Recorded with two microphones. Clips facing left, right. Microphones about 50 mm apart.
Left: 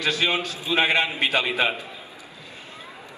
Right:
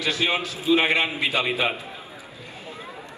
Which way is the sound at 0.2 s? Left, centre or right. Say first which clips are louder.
Even; left.